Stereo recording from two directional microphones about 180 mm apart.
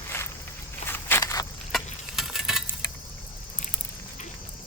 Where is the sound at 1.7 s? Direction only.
Centre (ahead or behind).